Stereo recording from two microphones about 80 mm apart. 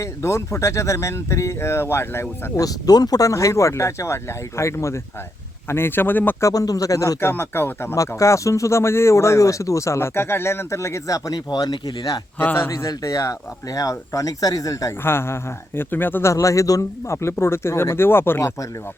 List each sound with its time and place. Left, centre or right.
0.0 s speech: left
2.6 s a man's voice: left
6.4 s speech: left
7.9 s speech: left
11.3 s speech: left
12.4 s a man's voice: left
12.9 s speech: left
16.3 s speech: left